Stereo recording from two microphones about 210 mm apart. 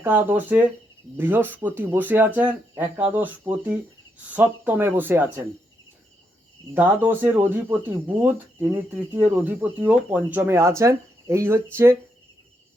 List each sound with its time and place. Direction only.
0.0 s speech: 10° right (ahead or behind)
6.7 s speech: 10° right (ahead or behind)